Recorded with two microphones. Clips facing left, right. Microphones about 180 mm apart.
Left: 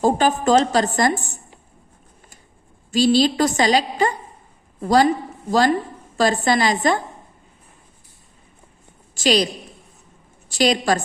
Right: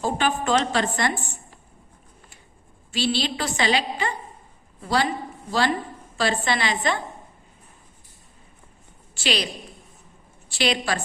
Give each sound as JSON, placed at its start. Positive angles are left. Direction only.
{"t": 0.0, "sound": "a woman's voice", "side_deg": 40}
{"t": 2.9, "sound": "a woman's voice", "side_deg": 40}
{"t": 9.1, "sound": "a woman's voice", "side_deg": 40}
{"t": 10.5, "sound": "a woman's voice", "side_deg": 40}